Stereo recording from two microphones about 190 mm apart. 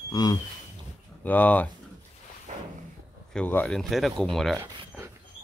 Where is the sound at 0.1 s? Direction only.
20° left (ahead or behind).